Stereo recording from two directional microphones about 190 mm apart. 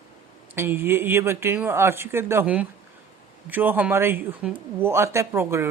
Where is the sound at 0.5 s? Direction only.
10° right (ahead or behind).